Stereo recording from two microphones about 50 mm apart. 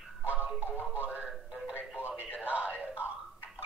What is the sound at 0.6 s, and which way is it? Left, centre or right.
Music, right.